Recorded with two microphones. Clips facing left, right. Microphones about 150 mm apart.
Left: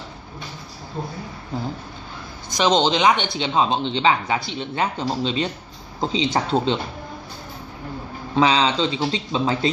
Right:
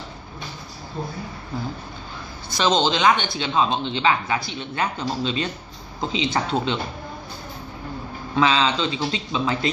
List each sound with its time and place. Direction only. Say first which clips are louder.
2.5 s speech: left 2 dB; 15° left (ahead or behind)
8.4 s speech: left 2 dB; 20° left (ahead or behind)